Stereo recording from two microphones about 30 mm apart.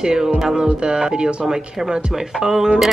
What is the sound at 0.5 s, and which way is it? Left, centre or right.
A woman's voice, right.